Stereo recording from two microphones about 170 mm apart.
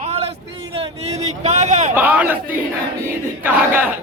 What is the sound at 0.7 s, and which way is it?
Vehicle, 35° right (ahead or behind).